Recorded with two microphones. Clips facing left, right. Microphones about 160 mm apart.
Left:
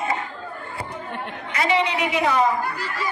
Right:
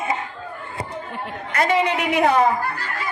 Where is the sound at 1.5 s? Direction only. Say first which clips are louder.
Right 2 dB; 50° right (ahead or behind).